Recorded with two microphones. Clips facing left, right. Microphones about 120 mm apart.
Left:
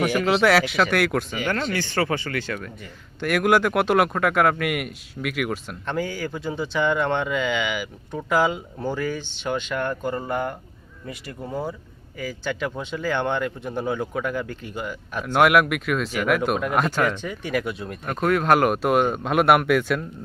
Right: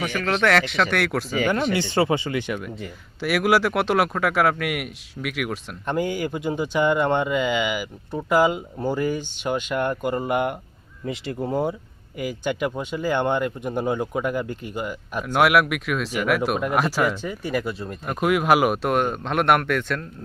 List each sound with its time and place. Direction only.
0.0 s speech: 5° left (ahead or behind)
1.5 s speech: 15° right (ahead or behind)
3.2 s speech: 5° right (ahead or behind)
5.8 s speech: 15° right (ahead or behind)
11.1 s speech: 25° right (ahead or behind)
12.2 s speech: 15° right (ahead or behind); by 20.1 s 5° left (ahead or behind)